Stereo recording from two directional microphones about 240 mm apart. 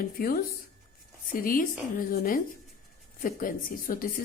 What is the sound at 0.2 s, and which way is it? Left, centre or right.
A woman's voice, left.